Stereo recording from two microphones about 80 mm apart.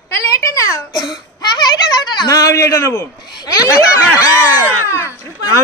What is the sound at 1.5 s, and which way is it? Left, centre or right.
Speech, left.